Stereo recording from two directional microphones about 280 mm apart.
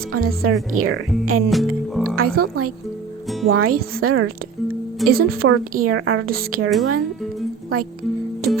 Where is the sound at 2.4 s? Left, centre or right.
Right.